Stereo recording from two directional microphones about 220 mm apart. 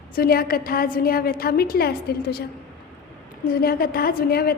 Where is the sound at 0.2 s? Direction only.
45° left (ahead or behind).